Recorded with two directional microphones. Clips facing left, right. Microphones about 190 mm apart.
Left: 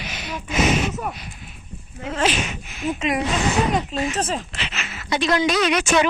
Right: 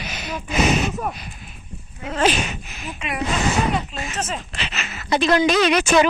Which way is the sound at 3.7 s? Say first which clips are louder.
Left 4 dB; 35° left (ahead or behind).